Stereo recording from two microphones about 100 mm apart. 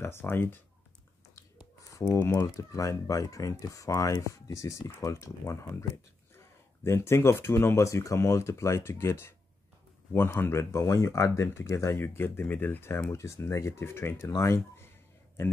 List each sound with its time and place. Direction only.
0.0 s speech: 25° left (ahead or behind)
2.1 s speech: 25° left (ahead or behind)
10.4 s speech: 25° left (ahead or behind)